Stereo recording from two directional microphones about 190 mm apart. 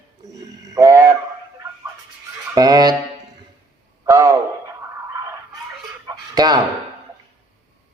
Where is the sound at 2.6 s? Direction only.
20° right (ahead or behind).